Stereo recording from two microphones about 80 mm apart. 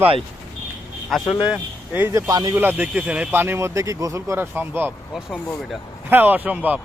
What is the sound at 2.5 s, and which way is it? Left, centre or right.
Speech, right.